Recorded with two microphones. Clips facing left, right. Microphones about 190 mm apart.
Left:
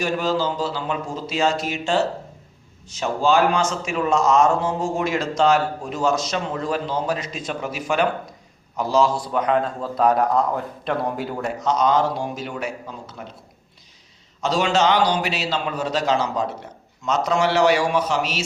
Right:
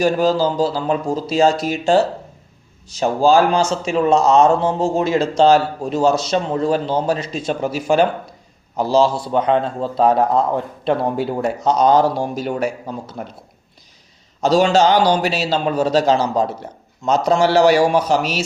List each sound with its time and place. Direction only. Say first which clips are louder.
0.0 s a man's voice: right 6 dB; 35° right (ahead or behind)
14.4 s a man's voice: right 6 dB; 35° right (ahead or behind)